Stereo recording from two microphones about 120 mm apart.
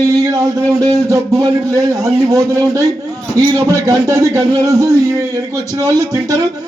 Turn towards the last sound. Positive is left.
turn(degrees=-25)  # may be behind; listen again after turning